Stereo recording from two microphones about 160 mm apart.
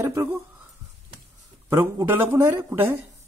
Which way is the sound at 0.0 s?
20° right (ahead or behind).